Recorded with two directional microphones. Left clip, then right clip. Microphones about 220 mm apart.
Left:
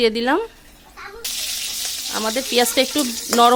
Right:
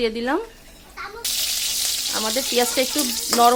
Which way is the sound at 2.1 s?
50° left (ahead or behind).